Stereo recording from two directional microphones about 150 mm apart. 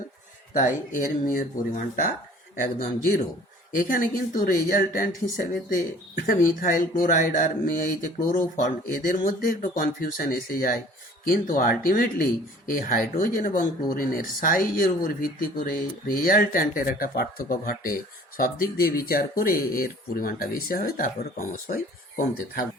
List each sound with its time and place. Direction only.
0.5 s speech: 60° left (ahead or behind)